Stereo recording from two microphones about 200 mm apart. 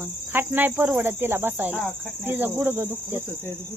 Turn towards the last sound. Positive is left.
turn(degrees=-10)  # may be behind; listen again after turning